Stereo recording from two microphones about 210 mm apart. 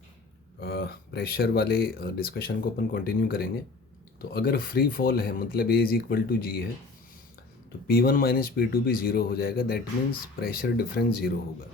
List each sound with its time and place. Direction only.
0.6 s speech: 50° left (ahead or behind)
7.9 s speech: 45° left (ahead or behind)